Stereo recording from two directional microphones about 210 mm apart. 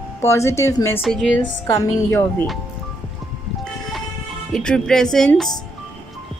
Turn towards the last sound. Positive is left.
turn(degrees=5)  # may be behind; listen again after turning